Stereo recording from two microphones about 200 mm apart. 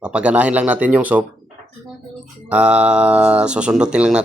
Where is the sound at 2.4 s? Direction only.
5° right (ahead or behind).